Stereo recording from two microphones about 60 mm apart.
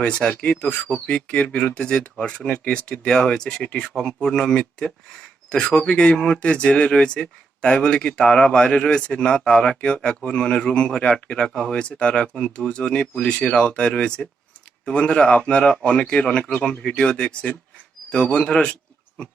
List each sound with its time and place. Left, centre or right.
0.0 s speech: centre